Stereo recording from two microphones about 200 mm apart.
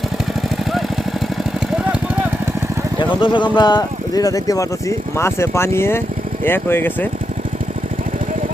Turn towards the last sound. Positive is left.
turn(degrees=10)  # may be behind; listen again after turning